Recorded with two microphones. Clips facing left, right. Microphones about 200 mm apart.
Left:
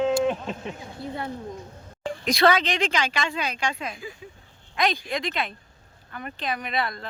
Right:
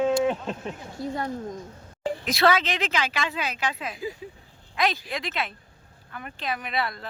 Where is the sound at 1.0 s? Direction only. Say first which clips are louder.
Right 3 dB; 45° right (ahead or behind).